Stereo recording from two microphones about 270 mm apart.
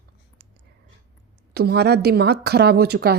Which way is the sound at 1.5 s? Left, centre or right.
Right.